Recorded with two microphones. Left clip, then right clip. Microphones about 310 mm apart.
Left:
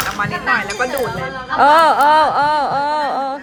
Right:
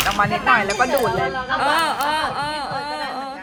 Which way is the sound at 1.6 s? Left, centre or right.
Left.